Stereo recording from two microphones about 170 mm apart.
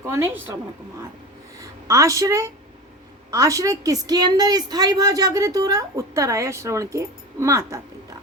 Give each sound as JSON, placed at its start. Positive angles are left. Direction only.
{"t": 0.0, "sound": "a woman's voice", "side_deg": -15}
{"t": 1.5, "sound": "a woman's voice", "side_deg": -20}